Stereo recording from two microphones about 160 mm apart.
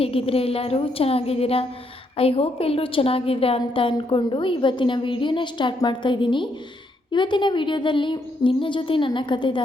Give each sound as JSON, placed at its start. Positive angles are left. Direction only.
{"t": 0.0, "sound": "a woman's voice", "side_deg": 35}